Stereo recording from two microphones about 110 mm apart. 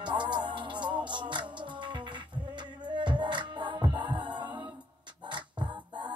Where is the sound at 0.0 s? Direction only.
45° right (ahead or behind).